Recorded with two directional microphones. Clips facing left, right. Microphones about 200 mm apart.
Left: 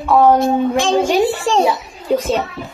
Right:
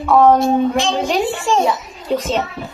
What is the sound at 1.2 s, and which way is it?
Child singing, 35° left (ahead or behind).